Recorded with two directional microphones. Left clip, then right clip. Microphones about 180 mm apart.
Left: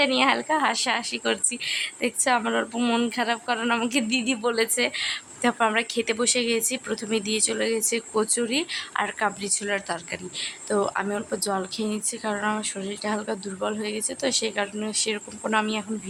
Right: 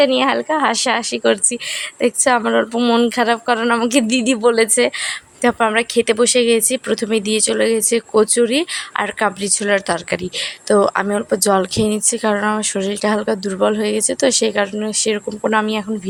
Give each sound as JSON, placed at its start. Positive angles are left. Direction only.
{"t": 0.0, "sound": "speech", "side_deg": -30}